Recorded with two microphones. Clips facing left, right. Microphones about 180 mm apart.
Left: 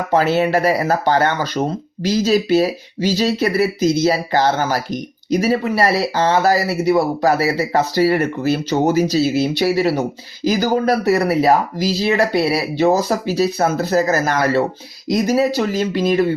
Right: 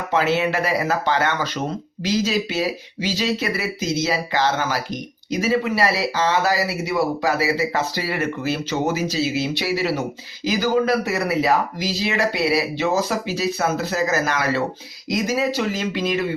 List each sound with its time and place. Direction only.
0.1 s speech: 40° left (ahead or behind)